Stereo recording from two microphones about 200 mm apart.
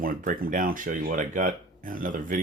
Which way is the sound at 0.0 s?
45° right (ahead or behind).